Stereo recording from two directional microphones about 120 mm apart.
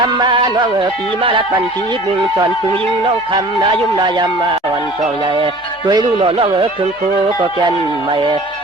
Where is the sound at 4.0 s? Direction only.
40° right (ahead or behind).